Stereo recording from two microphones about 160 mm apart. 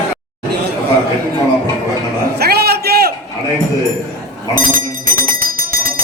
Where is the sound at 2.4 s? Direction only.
85° right.